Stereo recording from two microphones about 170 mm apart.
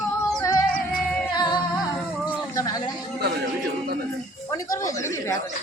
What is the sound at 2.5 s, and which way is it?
Speech, 20° left (ahead or behind).